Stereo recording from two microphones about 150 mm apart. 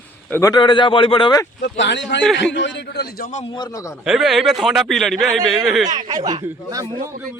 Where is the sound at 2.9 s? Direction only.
90° left.